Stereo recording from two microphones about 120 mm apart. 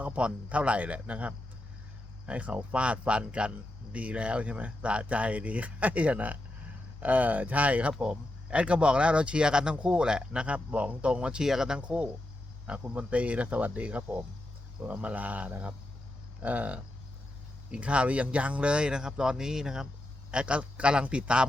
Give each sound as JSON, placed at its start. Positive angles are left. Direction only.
{"t": 0.0, "sound": "speech", "side_deg": -10}